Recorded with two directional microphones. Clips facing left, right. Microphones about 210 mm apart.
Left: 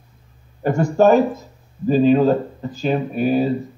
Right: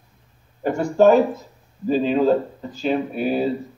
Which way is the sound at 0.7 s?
45° left (ahead or behind).